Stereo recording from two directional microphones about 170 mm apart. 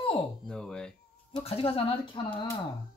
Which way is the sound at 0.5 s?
5° left (ahead or behind).